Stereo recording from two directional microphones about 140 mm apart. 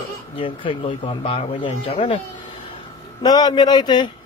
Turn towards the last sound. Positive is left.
turn(degrees=30)  # may be behind; listen again after turning